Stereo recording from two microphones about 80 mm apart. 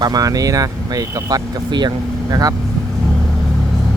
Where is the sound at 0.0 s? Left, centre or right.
Right.